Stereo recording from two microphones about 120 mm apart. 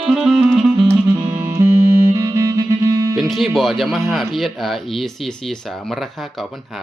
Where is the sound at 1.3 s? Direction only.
20° right (ahead or behind).